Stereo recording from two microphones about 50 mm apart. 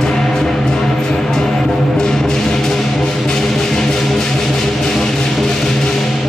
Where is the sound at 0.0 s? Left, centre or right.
Centre.